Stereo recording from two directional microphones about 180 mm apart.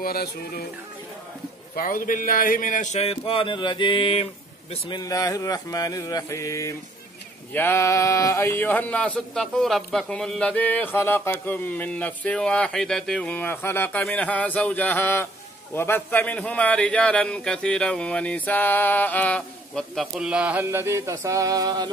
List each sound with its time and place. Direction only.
0.0 s speech: 60° left (ahead or behind)
1.8 s speech: 50° left (ahead or behind); by 4.3 s 30° left (ahead or behind)
4.8 s mantra: 20° left (ahead or behind)
7.5 s a man's voice: 10° left (ahead or behind); by 21.9 s 20° right (ahead or behind)